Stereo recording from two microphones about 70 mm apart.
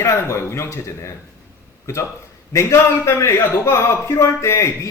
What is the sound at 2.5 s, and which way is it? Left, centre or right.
A man's voice, left.